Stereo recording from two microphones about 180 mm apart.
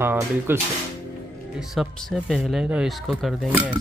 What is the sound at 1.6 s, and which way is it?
Speech, centre (ahead or behind).